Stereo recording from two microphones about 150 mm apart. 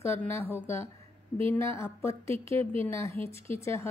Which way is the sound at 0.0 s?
15° left (ahead or behind).